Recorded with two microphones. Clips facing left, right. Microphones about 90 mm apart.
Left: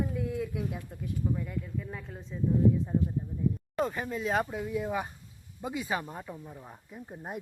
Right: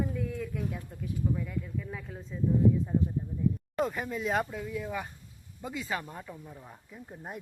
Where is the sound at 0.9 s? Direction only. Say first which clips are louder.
Even; 5° left (ahead or behind).